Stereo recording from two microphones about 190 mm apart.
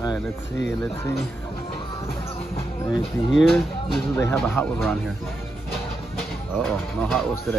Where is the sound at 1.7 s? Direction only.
30° left (ahead or behind).